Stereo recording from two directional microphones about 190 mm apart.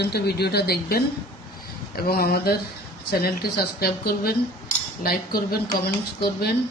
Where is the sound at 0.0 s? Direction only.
60° left (ahead or behind).